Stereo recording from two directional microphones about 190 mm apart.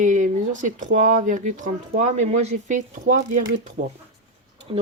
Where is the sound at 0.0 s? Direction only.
40° right (ahead or behind).